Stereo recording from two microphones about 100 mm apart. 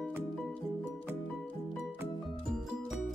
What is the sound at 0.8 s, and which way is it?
Music, 20° right (ahead or behind).